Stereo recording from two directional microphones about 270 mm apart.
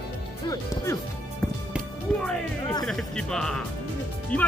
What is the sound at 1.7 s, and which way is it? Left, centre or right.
Music, centre.